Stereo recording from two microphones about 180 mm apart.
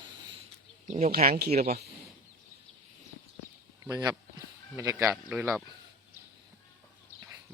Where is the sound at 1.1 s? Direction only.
55° right (ahead or behind).